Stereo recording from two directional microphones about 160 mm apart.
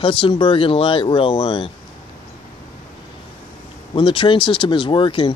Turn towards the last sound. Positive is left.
turn(degrees=30)  # may be behind; listen again after turning